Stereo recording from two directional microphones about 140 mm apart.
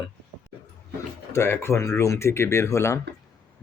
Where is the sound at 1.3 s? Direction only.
20° left (ahead or behind).